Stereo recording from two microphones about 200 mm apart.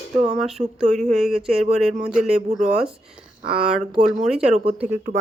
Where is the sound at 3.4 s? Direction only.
5° right (ahead or behind).